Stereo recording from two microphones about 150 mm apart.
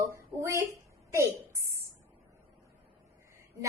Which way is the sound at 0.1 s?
20° right (ahead or behind).